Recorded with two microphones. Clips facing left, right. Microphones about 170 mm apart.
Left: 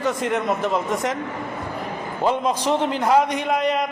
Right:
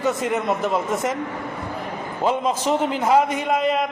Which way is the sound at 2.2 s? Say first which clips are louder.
Even; centre (ahead or behind).